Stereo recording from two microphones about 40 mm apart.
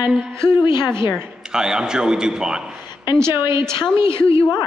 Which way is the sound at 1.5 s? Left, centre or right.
Centre.